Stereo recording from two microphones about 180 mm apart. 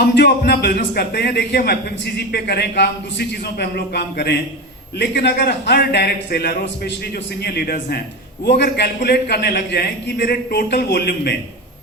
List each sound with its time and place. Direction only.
0.0 s a man's voice: 65° left (ahead or behind)